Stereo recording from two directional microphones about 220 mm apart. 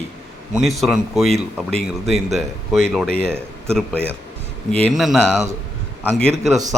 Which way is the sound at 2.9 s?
Centre (ahead or behind).